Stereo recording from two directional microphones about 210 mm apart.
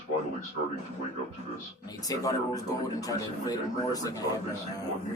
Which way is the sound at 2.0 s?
15° left (ahead or behind).